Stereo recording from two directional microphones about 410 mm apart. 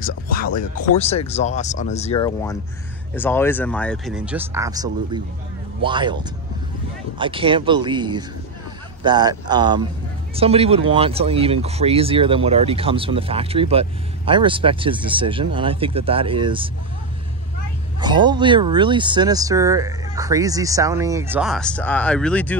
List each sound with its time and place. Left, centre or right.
0.0 s speech: centre
18.0 s speech: centre